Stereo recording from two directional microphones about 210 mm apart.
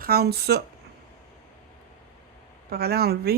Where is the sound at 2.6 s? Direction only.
50° right (ahead or behind).